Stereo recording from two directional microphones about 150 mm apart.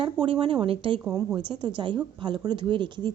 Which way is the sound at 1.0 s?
25° right (ahead or behind).